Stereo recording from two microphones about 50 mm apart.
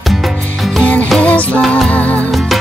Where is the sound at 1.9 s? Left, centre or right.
Left.